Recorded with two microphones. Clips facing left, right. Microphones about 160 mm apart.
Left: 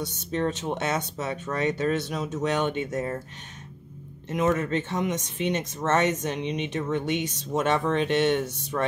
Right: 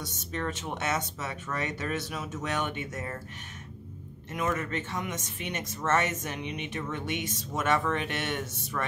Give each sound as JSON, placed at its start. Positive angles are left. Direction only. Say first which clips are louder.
{"t": 0.3, "sound": "speech", "louder": "left 7 dB", "side_deg": 25}
{"t": 4.3, "sound": "speech", "louder": "left 7 dB", "side_deg": 25}